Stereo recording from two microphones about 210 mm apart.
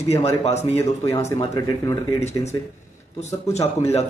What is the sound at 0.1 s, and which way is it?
Speech, 30° left (ahead or behind).